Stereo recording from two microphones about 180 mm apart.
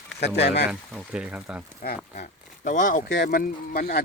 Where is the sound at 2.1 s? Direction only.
45° left (ahead or behind).